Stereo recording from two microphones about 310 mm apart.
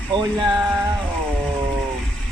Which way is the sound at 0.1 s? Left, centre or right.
Centre.